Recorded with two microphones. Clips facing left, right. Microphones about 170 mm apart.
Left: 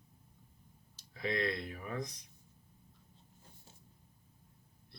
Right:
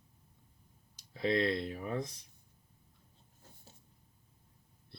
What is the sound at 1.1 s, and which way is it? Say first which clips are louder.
Speech: right 5 dB; 30° right (ahead or behind).